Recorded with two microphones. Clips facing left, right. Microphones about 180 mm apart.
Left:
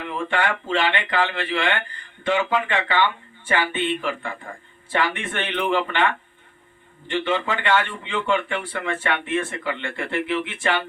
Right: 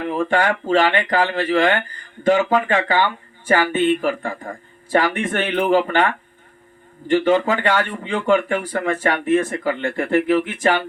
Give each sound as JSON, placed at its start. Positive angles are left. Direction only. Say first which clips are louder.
{"t": 0.0, "sound": "speech", "louder": "right 5 dB", "side_deg": -40}